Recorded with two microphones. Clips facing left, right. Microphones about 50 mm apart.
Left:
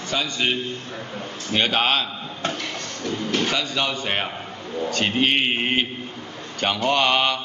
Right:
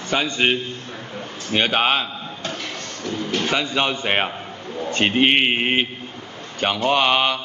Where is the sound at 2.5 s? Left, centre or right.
Centre.